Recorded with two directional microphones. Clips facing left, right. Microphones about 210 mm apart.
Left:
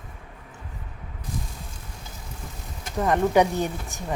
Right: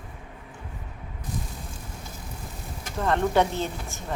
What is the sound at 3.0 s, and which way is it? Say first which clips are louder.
Speech: left 3 dB; 15° left (ahead or behind).